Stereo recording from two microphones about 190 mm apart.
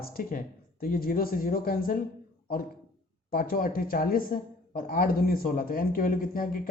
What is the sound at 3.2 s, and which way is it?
A woman's voice, 50° left (ahead or behind).